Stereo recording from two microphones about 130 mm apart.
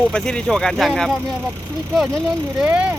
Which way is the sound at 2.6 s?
10° right (ahead or behind).